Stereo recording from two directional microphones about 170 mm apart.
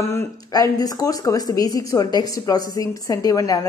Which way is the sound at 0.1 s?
20° left (ahead or behind).